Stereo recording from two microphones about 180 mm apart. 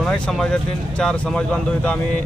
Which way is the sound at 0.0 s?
5° left (ahead or behind).